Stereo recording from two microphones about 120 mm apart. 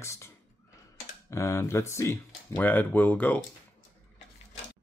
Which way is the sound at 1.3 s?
25° left (ahead or behind).